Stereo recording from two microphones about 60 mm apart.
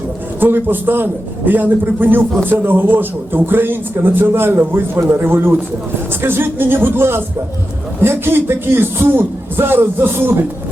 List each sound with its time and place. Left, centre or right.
0.3 s a man's voice: right